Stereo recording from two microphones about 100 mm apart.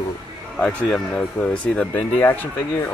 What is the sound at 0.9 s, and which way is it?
Speech, 10° left (ahead or behind).